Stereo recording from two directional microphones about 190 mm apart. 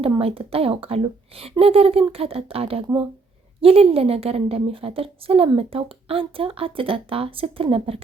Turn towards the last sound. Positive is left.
turn(degrees=-30)  # may be behind; listen again after turning